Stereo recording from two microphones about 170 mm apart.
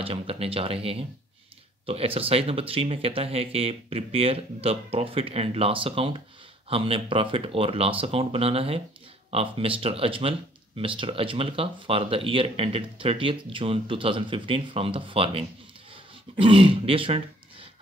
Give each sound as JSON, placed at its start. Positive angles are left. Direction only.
{"t": 0.0, "sound": "speech", "side_deg": -35}
{"t": 15.9, "sound": "throat clearing", "side_deg": -30}